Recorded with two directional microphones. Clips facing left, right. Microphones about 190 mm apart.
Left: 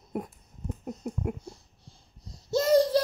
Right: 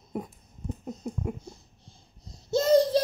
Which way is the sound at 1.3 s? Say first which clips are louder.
Even; 20° right (ahead or behind).